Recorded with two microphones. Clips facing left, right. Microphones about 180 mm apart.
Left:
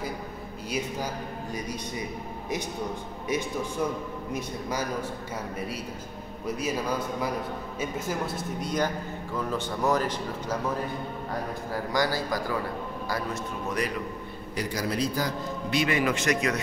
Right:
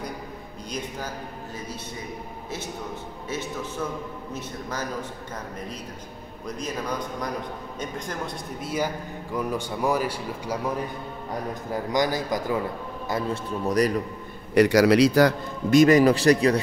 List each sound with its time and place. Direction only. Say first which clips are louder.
0.7 s a man's voice: left 2 dB; 10° left (ahead or behind)
3.3 s a man's voice: left 3 dB; 15° left (ahead or behind)
6.4 s a man's voice: left 2 dB; 10° left (ahead or behind); by 10.6 s 10° right (ahead or behind)
11.7 s a man's voice: right 3 dB; 20° right (ahead or behind)
13.1 s a man's voice: right 5 dB; 35° right (ahead or behind)
14.5 s a man's voice: right 14 dB; 75° right (ahead or behind)
15.7 s a man's voice: right 10 dB; 40° right (ahead or behind)